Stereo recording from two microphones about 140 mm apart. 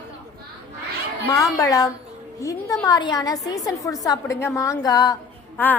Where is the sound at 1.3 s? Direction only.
25° left (ahead or behind).